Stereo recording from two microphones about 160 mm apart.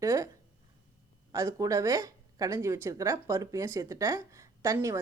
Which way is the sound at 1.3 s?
20° right (ahead or behind).